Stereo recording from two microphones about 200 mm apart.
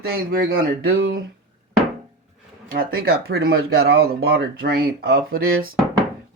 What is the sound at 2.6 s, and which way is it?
Speech, 45° right (ahead or behind).